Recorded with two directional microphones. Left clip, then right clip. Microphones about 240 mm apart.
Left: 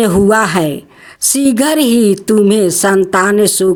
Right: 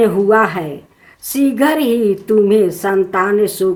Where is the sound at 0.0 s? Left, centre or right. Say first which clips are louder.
Left 1 dB; left.